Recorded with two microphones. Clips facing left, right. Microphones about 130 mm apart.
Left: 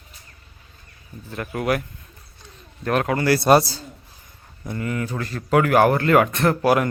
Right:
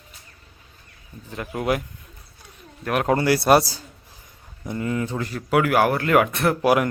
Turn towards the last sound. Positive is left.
turn(degrees=-10)  # may be behind; listen again after turning